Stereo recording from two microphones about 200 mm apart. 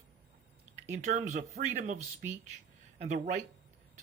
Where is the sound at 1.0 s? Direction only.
40° right (ahead or behind).